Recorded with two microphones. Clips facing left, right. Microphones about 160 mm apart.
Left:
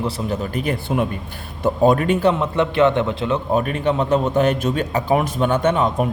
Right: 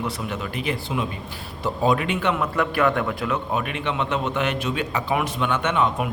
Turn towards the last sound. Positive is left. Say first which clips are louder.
# left 5 dB
turn(degrees=40)  # may be behind; listen again after turning